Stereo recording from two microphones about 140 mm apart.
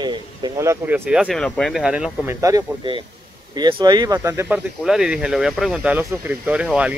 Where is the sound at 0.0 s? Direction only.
30° right (ahead or behind).